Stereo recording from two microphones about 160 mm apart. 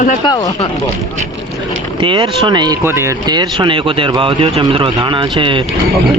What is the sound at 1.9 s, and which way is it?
Speech, 30° right (ahead or behind).